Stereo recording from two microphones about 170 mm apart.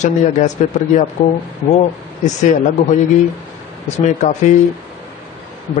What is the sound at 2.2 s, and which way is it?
Speech, 45° left (ahead or behind).